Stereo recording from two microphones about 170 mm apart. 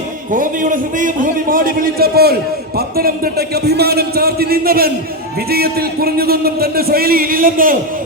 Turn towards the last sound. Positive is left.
turn(degrees=-55)  # may be behind; listen again after turning